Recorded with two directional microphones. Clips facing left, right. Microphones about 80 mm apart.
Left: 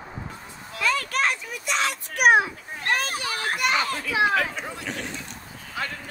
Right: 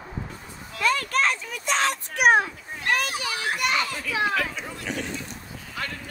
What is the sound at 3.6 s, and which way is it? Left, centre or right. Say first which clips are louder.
Children playing: left 2 dB; left.